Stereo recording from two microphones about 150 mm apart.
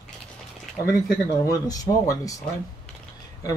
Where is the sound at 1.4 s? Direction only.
25° left (ahead or behind).